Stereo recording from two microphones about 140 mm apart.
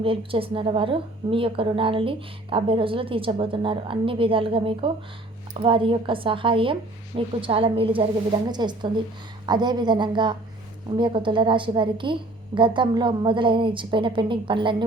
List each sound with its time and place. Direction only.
0.0 s a woman's voice: 40° right (ahead or behind)